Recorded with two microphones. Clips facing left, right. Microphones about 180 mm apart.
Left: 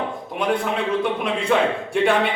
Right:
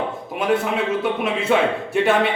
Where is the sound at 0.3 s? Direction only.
5° right (ahead or behind).